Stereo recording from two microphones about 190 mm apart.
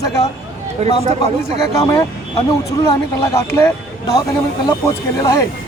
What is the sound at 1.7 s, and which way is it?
Speech, 20° left (ahead or behind).